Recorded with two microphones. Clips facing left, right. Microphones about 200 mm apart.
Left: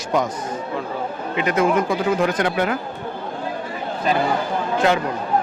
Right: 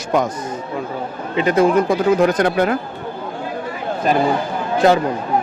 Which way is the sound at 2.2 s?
40° right (ahead or behind).